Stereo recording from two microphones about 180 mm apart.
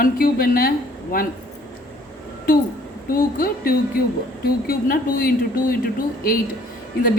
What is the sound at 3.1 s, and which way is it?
Speech, 55° left (ahead or behind).